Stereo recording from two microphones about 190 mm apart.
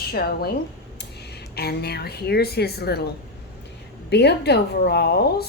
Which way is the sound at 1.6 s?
55° left (ahead or behind).